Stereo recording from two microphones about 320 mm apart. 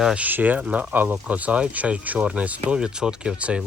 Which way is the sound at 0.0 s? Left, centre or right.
Centre.